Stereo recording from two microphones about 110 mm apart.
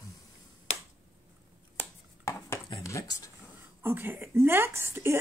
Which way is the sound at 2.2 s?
25° left (ahead or behind).